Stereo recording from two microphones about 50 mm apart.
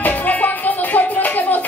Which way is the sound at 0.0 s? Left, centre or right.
Left.